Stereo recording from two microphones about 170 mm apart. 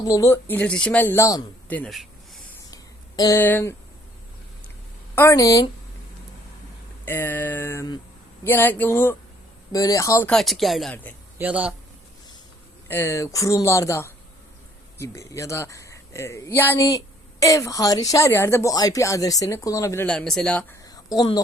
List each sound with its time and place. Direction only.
0.0 s speech: 20° left (ahead or behind); by 2.4 s centre (ahead or behind)
2.6 s a sound: 20° left (ahead or behind)
5.1 s speech: 15° left (ahead or behind)
7.0 s speech: 10° left (ahead or behind)
10.2 s a man's voice: centre (ahead or behind)
12.9 s speech: 15° left (ahead or behind)
20.1 s speech: 5° left (ahead or behind)
21.2 s speech: 25° left (ahead or behind)